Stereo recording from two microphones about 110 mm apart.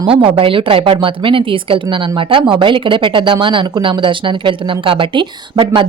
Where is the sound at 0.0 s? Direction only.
55° right (ahead or behind).